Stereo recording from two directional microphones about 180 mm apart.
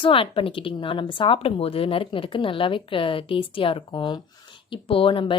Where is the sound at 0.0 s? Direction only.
30° left (ahead or behind).